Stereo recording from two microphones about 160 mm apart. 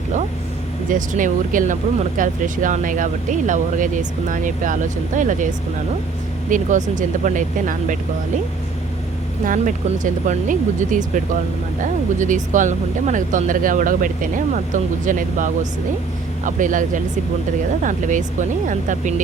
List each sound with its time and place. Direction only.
0.9 s speech: 55° right (ahead or behind)
6.5 s speech: 50° right (ahead or behind)
9.5 s speech: 55° right (ahead or behind)